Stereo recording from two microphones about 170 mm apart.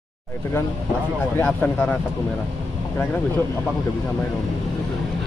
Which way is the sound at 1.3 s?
10° left (ahead or behind).